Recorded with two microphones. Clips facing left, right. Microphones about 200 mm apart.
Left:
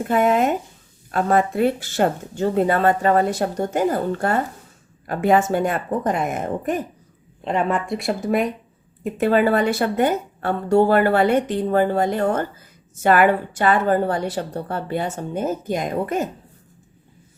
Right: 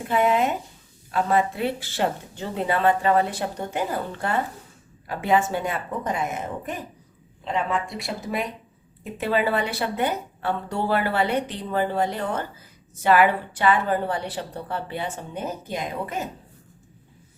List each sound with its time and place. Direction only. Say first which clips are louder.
0.1 s speech: left 3 dB; 45° left (ahead or behind)